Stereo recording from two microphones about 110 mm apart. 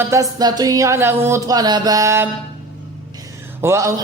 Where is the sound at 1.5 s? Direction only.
40° right (ahead or behind).